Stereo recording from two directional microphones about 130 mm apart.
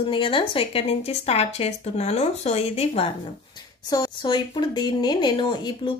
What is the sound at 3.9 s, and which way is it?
A woman's voice, 30° left (ahead or behind).